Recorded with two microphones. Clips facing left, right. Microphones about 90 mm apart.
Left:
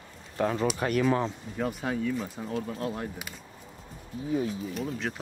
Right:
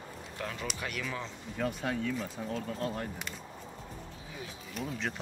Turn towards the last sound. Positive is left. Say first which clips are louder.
# left 4 dB
turn(degrees=0)  # may be behind; listen again after turning